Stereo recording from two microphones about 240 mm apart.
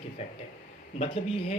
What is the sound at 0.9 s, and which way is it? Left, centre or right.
Speech, left.